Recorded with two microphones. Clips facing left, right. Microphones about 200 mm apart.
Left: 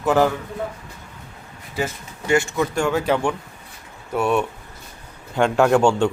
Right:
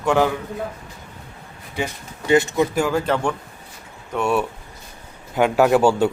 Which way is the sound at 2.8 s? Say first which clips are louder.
Even; centre (ahead or behind).